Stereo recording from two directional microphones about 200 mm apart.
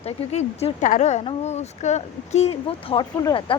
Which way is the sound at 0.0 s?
30° left (ahead or behind).